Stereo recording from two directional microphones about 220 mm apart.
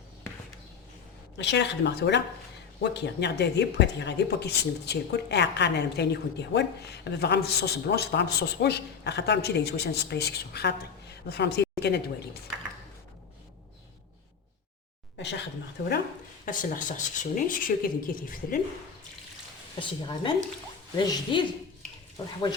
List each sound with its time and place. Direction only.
1.4 s speech: 50° left (ahead or behind)
15.8 s speech: 50° left (ahead or behind)
16.5 s speech: 35° left (ahead or behind)
19.8 s speech: 25° left (ahead or behind)